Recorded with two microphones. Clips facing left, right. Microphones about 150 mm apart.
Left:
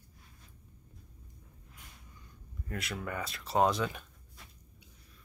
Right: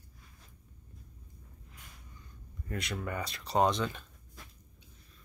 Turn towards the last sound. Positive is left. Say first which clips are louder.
# even
turn(degrees=10)  # may be behind; listen again after turning